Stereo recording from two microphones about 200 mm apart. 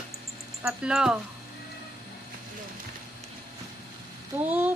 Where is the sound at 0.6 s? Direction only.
5° right (ahead or behind).